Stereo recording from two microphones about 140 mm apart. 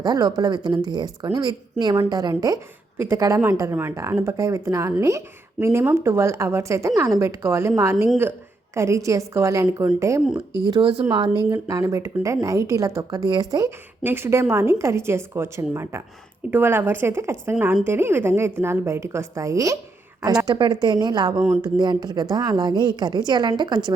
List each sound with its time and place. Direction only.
0.0 s a woman's voice: 30° right (ahead or behind)
11.5 s a woman's voice: 20° right (ahead or behind)
21.3 s speech: 55° right (ahead or behind)
21.8 s a woman's voice: 30° right (ahead or behind)